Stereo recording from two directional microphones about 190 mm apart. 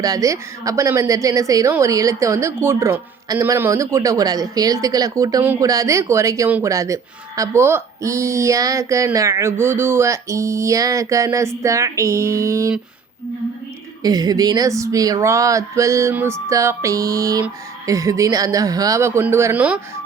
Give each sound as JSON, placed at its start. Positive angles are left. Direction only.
{"t": 0.0, "sound": "a woman's voice", "side_deg": -20}
{"t": 14.0, "sound": "a woman's voice", "side_deg": -20}